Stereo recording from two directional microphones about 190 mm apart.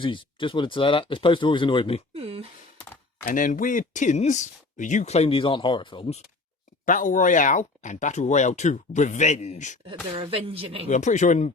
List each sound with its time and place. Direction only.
0.0 s speech: 25° left (ahead or behind)
2.1 s speech: 30° right (ahead or behind)
3.2 s speech: 45° left (ahead or behind)
6.8 s speech: 45° left (ahead or behind)
9.8 s speech: 30° right (ahead or behind)
10.8 s speech: 40° left (ahead or behind)